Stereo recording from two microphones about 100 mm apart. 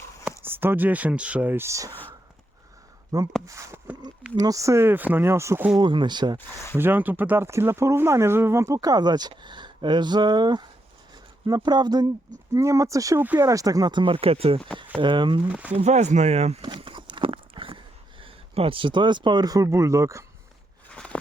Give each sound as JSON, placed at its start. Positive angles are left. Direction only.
{"t": 0.3, "sound": "speech", "side_deg": -20}
{"t": 3.4, "sound": "speech", "side_deg": -30}
{"t": 5.8, "sound": "speech", "side_deg": -50}
{"t": 6.7, "sound": "speech", "side_deg": -20}
{"t": 12.5, "sound": "speech", "side_deg": -30}
{"t": 13.1, "sound": "speech", "side_deg": -15}
{"t": 13.4, "sound": "speech", "side_deg": -35}
{"t": 13.9, "sound": "speech", "side_deg": -55}
{"t": 15.0, "sound": "speech", "side_deg": -50}
{"t": 15.4, "sound": "speech", "side_deg": -15}
{"t": 15.7, "sound": "speech", "side_deg": -90}
{"t": 16.6, "sound": "a sound", "side_deg": -50}
{"t": 20.9, "sound": "walk", "side_deg": 10}